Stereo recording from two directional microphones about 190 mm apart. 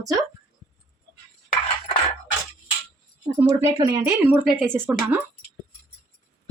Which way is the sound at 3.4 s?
20° right (ahead or behind).